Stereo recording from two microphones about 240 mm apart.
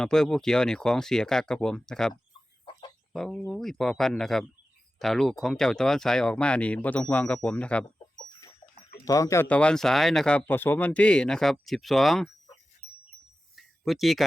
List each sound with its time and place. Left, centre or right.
0.0 s speech: centre
7.9 s chicken: centre
9.0 s speech: centre
13.6 s a sound: centre